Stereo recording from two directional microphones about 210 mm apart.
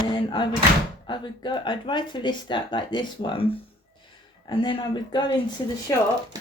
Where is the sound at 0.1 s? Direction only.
25° left (ahead or behind).